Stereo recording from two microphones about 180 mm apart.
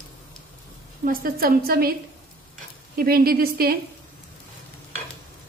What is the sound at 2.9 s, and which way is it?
Speech, 55° right (ahead or behind).